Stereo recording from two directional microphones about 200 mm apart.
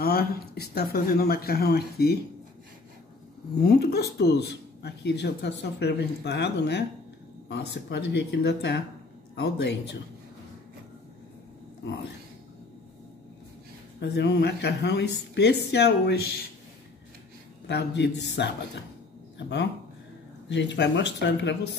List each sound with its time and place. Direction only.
0.0 s speech: 50° left (ahead or behind)
3.6 s speech: 50° left (ahead or behind)
13.9 s speech: 55° left (ahead or behind)
17.6 s speech: 60° left (ahead or behind)
19.3 s speech: 60° left (ahead or behind)